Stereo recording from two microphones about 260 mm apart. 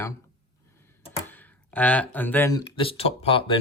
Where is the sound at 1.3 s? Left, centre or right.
Centre.